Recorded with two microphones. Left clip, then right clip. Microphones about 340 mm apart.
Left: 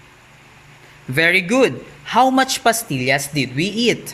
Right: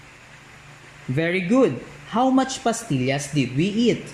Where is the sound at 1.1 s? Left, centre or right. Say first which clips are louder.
Left 6 dB; left.